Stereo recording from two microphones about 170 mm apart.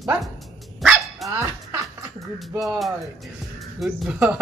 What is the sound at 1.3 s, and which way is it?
Speech, 15° right (ahead or behind).